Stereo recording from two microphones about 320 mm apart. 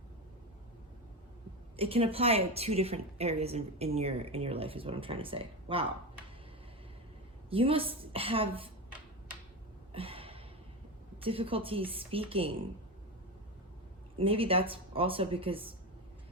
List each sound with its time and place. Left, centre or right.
1.7 s a woman's voice: centre
7.5 s a woman's voice: centre
9.9 s a sound: centre
11.2 s a woman's voice: centre
14.2 s a woman's voice: centre